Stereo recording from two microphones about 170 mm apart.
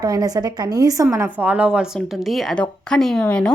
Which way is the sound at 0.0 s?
25° right (ahead or behind).